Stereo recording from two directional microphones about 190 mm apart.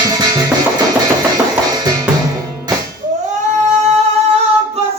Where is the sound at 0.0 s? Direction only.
20° right (ahead or behind).